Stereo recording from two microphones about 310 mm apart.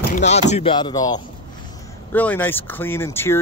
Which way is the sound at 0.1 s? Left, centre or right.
Left.